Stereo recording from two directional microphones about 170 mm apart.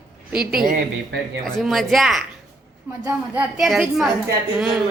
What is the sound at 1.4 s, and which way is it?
Speech, centre (ahead or behind).